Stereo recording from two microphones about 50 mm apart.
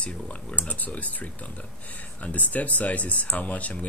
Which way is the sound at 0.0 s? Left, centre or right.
Left.